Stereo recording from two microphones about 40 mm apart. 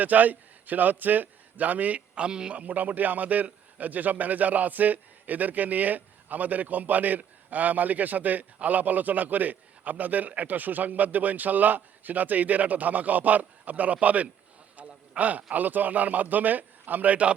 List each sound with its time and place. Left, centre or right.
0.0 s a man's voice: right
2.1 s speech: right
2.6 s a man's voice: right